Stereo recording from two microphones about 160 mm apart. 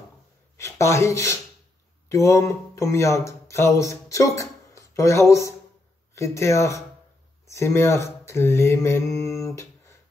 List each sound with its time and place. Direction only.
0.6 s speech: 20° left (ahead or behind)